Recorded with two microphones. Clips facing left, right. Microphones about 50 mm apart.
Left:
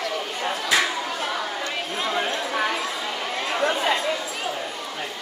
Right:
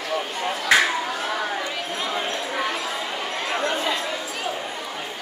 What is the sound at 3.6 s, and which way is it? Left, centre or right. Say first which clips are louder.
Chatter: left 4 dB; left.